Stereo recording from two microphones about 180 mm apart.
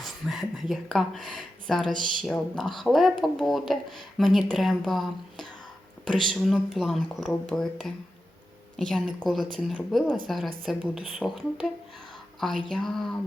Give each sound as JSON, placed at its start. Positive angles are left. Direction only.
{"t": 0.0, "sound": "speech", "side_deg": 0}